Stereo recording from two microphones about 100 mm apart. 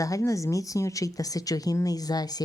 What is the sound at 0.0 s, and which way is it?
Speech, 35° left (ahead or behind).